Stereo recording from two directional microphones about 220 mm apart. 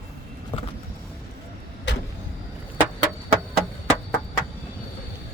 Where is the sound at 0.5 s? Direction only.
20° left (ahead or behind).